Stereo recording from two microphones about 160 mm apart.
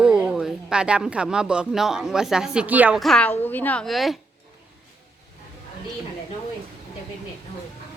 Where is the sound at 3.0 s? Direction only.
5° left (ahead or behind).